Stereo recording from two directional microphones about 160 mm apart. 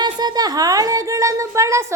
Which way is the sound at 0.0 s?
25° right (ahead or behind).